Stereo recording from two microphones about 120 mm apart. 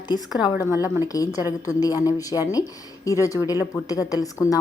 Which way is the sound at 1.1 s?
30° left (ahead or behind).